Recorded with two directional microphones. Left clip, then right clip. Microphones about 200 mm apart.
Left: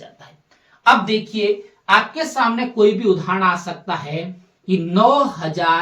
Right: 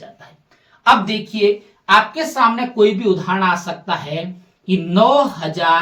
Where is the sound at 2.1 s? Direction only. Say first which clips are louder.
Right 3 dB; 10° left (ahead or behind).